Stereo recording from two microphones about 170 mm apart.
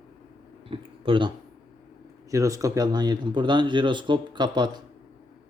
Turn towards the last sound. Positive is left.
turn(degrees=-25)  # may be behind; listen again after turning